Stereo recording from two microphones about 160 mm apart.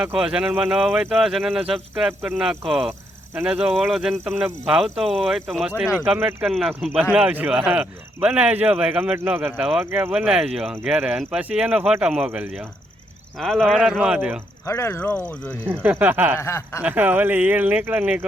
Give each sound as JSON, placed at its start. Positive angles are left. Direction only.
{"t": 0.0, "sound": "speech", "side_deg": -5}
{"t": 14.6, "sound": "speech", "side_deg": 15}
{"t": 15.7, "sound": "speech", "side_deg": -10}
{"t": 16.4, "sound": "speech", "side_deg": 15}
{"t": 16.8, "sound": "speech", "side_deg": -10}